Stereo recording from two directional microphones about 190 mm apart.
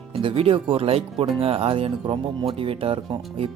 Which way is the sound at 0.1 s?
30° right (ahead or behind).